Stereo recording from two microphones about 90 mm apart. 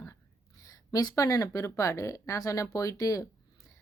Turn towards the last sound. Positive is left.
turn(degrees=40)  # may be behind; listen again after turning